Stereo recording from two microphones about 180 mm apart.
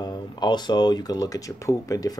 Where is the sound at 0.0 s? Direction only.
25° left (ahead or behind).